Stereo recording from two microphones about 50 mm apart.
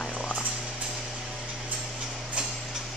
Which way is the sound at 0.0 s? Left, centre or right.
Centre.